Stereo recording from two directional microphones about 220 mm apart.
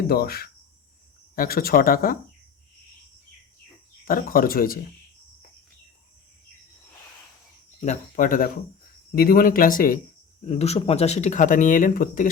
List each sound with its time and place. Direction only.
0.1 s speech: 45° left (ahead or behind)
4.0 s speech: 40° left (ahead or behind)
7.8 s speech: 35° left (ahead or behind)
10.4 s speech: 30° left (ahead or behind)